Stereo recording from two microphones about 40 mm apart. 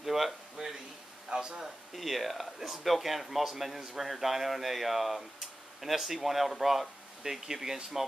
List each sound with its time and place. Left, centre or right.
0.0 s a sound: centre
1.3 s speech: centre
2.0 s speech: centre